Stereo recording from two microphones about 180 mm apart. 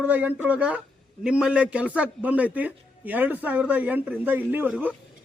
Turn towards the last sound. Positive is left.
turn(degrees=-10)  # may be behind; listen again after turning